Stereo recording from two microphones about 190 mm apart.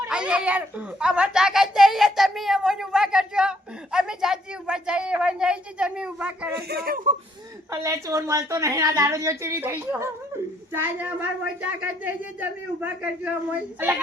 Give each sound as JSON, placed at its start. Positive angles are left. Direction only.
{"t": 0.0, "sound": "a child's voice", "side_deg": -5}
{"t": 6.6, "sound": "speech", "side_deg": -55}
{"t": 7.7, "sound": "speech", "side_deg": -15}